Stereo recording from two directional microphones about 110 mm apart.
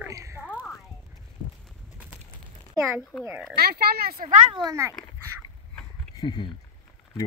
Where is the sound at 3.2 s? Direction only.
5° right (ahead or behind).